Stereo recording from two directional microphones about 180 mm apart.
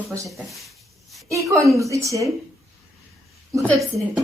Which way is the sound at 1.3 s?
15° right (ahead or behind).